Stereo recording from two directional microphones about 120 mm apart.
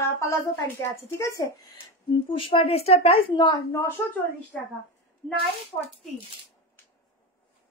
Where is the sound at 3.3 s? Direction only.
35° left (ahead or behind).